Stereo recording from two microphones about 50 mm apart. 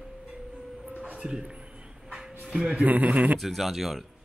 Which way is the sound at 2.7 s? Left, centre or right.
Right.